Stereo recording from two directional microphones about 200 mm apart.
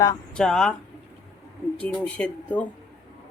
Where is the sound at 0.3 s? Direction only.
5° left (ahead or behind).